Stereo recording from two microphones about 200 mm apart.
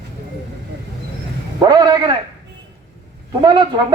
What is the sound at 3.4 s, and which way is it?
Speech, 20° right (ahead or behind).